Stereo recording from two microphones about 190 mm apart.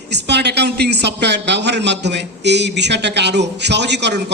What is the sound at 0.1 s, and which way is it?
A man's voice, 65° right (ahead or behind).